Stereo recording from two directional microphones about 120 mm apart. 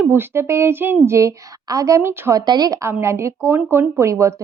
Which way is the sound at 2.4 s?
35° right (ahead or behind).